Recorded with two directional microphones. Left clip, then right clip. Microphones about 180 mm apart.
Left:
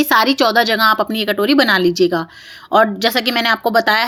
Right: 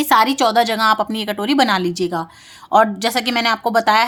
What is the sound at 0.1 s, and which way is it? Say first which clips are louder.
Speech: right 1 dB; 10° left (ahead or behind).